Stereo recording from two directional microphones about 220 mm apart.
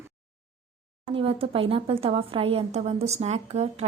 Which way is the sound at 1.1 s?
25° right (ahead or behind).